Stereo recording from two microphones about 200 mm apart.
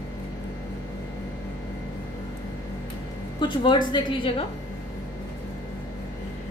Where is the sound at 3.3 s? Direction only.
25° left (ahead or behind).